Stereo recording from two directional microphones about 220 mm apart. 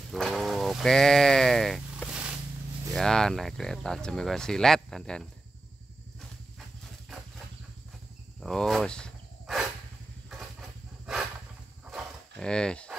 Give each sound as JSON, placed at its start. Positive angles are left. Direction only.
{"t": 0.1, "sound": "sheep", "side_deg": 0}
{"t": 2.9, "sound": "speech", "side_deg": 0}
{"t": 8.4, "sound": "a sound", "side_deg": 0}
{"t": 11.8, "sound": "dog", "side_deg": 0}